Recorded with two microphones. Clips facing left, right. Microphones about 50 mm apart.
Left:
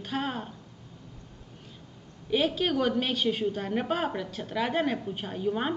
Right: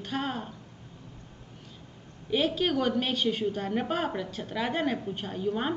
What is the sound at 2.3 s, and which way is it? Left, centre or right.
A woman's voice, centre.